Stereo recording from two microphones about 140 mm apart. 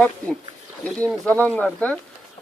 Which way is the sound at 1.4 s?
10° left (ahead or behind).